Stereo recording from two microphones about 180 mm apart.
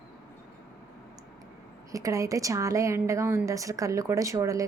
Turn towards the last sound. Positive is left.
turn(degrees=-15)  # may be behind; listen again after turning